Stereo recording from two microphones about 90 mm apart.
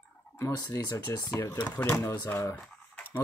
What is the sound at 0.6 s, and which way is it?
Speech, 45° left (ahead or behind).